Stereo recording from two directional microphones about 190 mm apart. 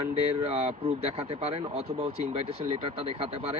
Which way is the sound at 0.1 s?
35° right (ahead or behind).